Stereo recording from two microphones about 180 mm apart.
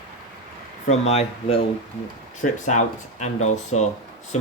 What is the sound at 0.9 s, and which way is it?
Speech, 35° left (ahead or behind).